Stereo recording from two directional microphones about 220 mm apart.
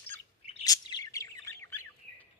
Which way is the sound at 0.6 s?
20° left (ahead or behind).